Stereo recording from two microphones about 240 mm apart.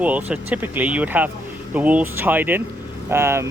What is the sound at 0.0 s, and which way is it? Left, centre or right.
Speech, centre.